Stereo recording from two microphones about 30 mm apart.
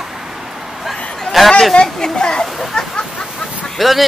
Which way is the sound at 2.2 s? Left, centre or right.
Left.